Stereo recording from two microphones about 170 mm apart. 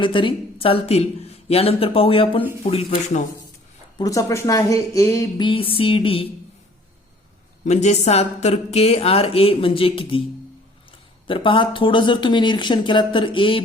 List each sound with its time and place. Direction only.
0.0 s a woman's voice: 30° left (ahead or behind)
3.9 s speech: 20° left (ahead or behind)
5.4 s a woman's voice: 30° left (ahead or behind)
7.6 s a woman's voice: 40° left (ahead or behind)
11.3 s speech: 30° left (ahead or behind)